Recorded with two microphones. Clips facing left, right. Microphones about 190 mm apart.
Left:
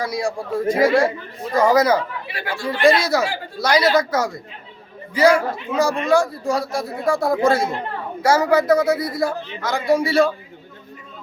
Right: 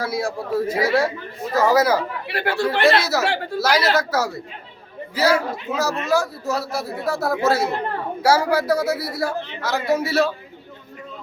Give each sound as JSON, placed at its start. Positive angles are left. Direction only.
{"t": 0.0, "sound": "a man's voice", "side_deg": -5}
{"t": 2.2, "sound": "speech", "side_deg": -65}
{"t": 2.8, "sound": "speech", "side_deg": -5}
{"t": 3.2, "sound": "speech", "side_deg": -70}
{"t": 3.6, "sound": "a man's voice", "side_deg": -5}